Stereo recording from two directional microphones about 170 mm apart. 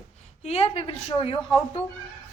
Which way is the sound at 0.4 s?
35° left (ahead or behind).